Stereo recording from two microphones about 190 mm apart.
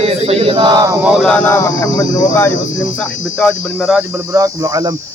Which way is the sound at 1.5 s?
15° left (ahead or behind).